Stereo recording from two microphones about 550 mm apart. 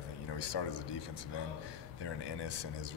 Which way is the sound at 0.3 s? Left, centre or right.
Left.